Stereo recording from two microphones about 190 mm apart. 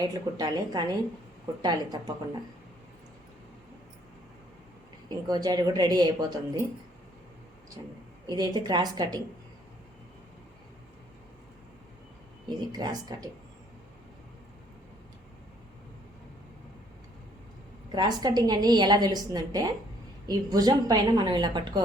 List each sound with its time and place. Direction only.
0.0 s a woman's voice: 20° right (ahead or behind)
5.0 s a woman's voice: 20° right (ahead or behind)
8.3 s a woman's voice: 20° right (ahead or behind)
12.5 s a woman's voice: 20° right (ahead or behind)
17.9 s a woman's voice: 25° right (ahead or behind)